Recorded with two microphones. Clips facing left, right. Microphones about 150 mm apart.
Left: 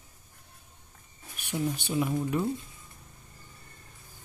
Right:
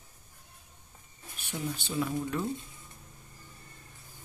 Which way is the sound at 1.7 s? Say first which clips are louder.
Left 3 dB; 15° left (ahead or behind).